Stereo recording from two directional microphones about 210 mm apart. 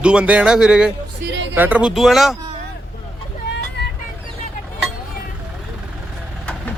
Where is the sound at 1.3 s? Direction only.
60° right (ahead or behind).